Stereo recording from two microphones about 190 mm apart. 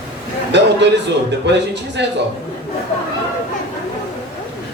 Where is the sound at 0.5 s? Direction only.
65° right (ahead or behind).